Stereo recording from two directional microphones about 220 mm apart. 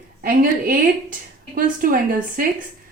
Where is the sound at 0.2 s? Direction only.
40° right (ahead or behind).